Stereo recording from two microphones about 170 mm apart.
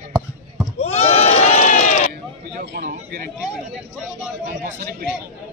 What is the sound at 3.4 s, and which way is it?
Speech, 5° right (ahead or behind).